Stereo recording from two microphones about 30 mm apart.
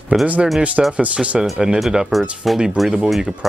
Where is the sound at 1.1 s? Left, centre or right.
Right.